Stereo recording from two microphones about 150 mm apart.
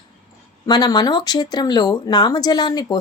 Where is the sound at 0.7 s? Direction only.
30° left (ahead or behind).